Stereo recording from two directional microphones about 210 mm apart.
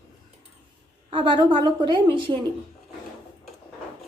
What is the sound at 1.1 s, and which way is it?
A woman's voice, 20° right (ahead or behind).